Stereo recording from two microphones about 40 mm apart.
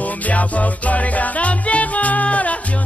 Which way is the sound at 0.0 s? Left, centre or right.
Left.